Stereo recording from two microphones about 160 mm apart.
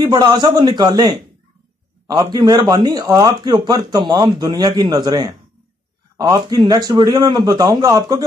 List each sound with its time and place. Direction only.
0.0 s a man's voice: 25° right (ahead or behind)